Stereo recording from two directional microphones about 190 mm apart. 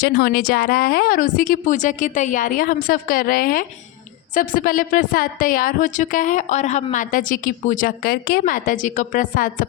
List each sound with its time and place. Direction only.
0.0 s a woman's voice: 55° left (ahead or behind)